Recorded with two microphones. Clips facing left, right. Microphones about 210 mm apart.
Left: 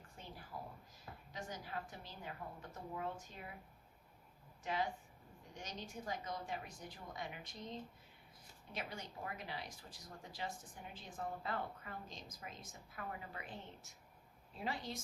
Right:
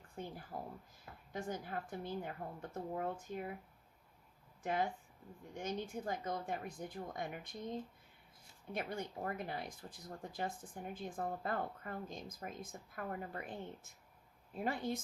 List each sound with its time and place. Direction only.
0.2 s speech: 55° right (ahead or behind)
4.6 s a woman's voice: 50° right (ahead or behind)